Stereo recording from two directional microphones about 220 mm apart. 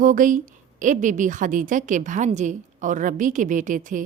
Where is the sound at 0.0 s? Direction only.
35° right (ahead or behind).